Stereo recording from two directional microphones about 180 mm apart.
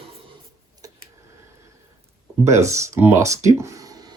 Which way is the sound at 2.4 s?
15° right (ahead or behind).